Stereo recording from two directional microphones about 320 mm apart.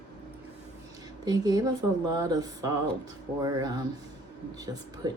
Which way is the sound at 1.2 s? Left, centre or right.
Centre.